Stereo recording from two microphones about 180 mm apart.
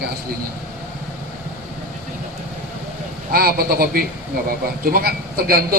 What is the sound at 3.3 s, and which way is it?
A man's voice, 55° right (ahead or behind).